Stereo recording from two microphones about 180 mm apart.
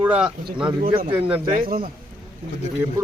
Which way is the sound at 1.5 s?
55° right (ahead or behind).